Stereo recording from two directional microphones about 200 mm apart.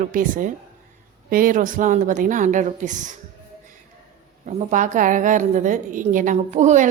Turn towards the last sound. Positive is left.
turn(degrees=-35)  # may be behind; listen again after turning